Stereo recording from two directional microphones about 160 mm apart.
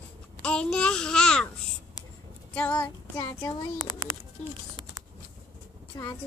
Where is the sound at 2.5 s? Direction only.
10° left (ahead or behind).